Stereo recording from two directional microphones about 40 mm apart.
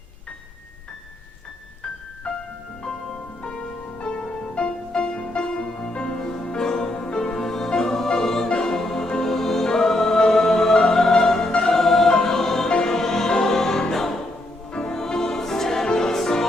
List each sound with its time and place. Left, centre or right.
2.3 s music: left
3.4 s music: left
11.6 s choir: centre
12.7 s music: centre